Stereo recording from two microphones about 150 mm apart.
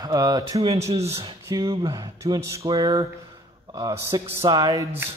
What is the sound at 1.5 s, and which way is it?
A man's voice, 25° right (ahead or behind).